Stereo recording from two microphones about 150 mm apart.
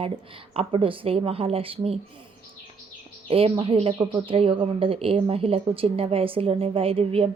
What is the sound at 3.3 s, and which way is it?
A woman's voice, 40° right (ahead or behind).